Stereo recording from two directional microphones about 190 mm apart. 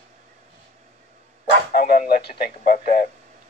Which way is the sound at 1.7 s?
50° left (ahead or behind).